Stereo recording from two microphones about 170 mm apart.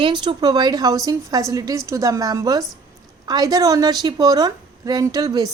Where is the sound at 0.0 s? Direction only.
30° right (ahead or behind).